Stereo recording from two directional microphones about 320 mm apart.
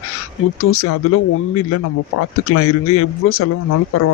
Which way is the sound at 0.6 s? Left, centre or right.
Left.